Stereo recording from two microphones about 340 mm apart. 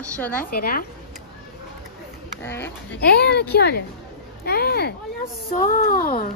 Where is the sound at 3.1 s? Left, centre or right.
Left.